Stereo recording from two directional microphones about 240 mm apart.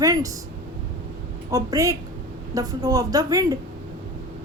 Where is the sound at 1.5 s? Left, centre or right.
Centre.